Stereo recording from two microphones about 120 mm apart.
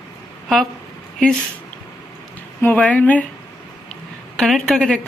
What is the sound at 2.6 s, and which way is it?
Speech, 10° left (ahead or behind).